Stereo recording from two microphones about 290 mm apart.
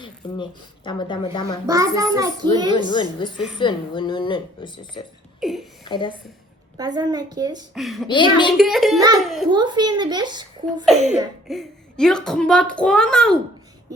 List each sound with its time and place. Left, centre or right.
0.2 s speech: centre
1.6 s a child's voice: centre
2.9 s speech: centre
5.4 s speech: centre
5.8 s speech: centre
6.7 s a child's voice: centre
7.7 s a woman's voice: centre
8.0 s speech: centre
8.5 s a woman's voice: centre
9.5 s a child's voice: centre
11.4 s a woman's voice: centre